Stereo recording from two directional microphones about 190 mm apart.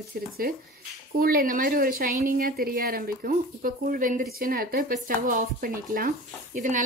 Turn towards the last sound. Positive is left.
turn(degrees=-45)  # may be behind; listen again after turning